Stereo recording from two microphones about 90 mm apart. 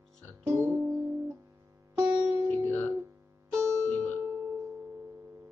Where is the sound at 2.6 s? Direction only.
20° left (ahead or behind).